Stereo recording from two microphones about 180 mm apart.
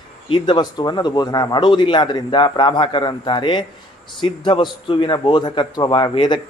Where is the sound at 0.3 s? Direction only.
25° left (ahead or behind).